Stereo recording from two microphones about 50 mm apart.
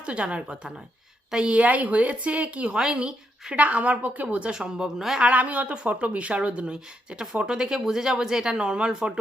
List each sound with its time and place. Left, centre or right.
0.0 s a woman's voice: right
2.7 s a woman's voice: centre
3.5 s a woman's voice: right; by 5.2 s centre
5.2 s a woman's voice: right